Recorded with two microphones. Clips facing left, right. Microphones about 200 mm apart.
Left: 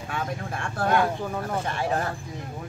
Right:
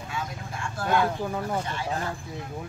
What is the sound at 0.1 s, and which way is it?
Vehicle, 60° left (ahead or behind).